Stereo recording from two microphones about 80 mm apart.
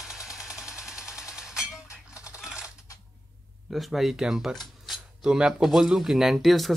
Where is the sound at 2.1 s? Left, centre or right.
Left.